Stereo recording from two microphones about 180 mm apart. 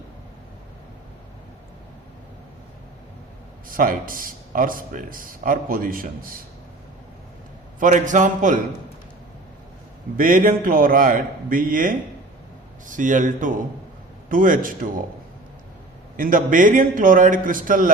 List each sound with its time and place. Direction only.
3.7 s speech: 50° right (ahead or behind)
7.8 s speech: 45° right (ahead or behind)
10.2 s speech: 50° right (ahead or behind)
16.1 s speech: 50° right (ahead or behind)